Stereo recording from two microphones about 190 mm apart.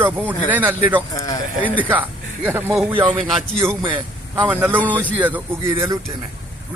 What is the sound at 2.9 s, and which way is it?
Speech, 25° right (ahead or behind).